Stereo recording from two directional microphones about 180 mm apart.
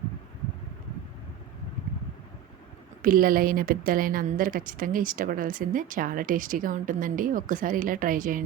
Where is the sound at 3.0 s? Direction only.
50° right (ahead or behind).